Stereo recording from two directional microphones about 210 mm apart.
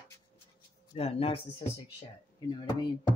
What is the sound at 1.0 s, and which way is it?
Speech, 30° left (ahead or behind).